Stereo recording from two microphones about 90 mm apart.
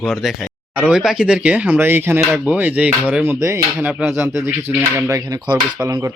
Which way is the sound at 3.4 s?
35° right (ahead or behind).